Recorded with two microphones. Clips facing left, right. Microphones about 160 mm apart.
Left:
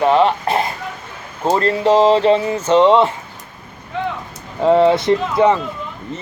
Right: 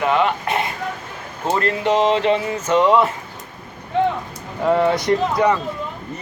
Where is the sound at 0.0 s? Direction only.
30° left (ahead or behind).